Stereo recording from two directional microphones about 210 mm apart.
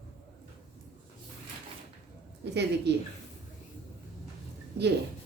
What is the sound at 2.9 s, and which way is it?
Speech, 55° right (ahead or behind).